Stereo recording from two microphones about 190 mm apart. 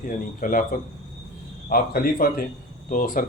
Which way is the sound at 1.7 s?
50° left (ahead or behind).